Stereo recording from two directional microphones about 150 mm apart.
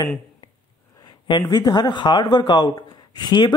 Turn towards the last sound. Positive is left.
turn(degrees=30)  # may be behind; listen again after turning